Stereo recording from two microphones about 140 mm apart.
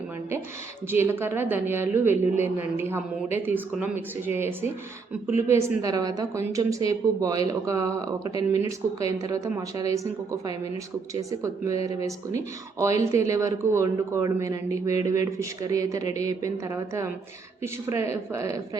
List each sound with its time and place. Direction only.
0.9 s a man's voice: 15° right (ahead or behind)